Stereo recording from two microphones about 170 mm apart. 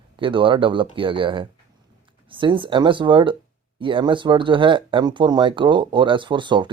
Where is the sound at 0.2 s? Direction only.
30° right (ahead or behind).